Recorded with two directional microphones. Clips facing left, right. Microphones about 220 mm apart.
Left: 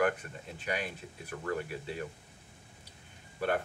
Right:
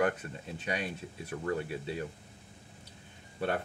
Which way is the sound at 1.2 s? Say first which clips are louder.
Right 2 dB; 25° right (ahead or behind).